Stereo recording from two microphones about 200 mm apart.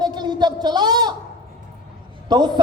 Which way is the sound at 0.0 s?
20° right (ahead or behind).